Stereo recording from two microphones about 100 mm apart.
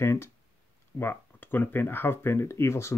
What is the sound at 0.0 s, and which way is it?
Speech, 25° left (ahead or behind).